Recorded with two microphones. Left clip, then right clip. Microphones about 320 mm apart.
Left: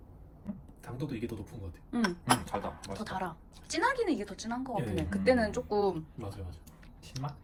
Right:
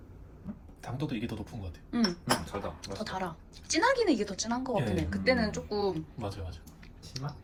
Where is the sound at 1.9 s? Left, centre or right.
Centre.